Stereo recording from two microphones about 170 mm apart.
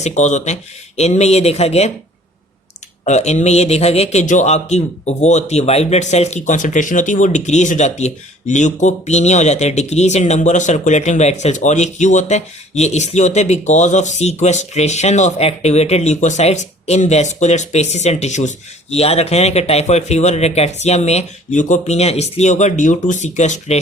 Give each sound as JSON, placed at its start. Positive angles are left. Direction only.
{"t": 0.0, "sound": "a man's voice", "side_deg": 45}
{"t": 3.0, "sound": "a man's voice", "side_deg": 45}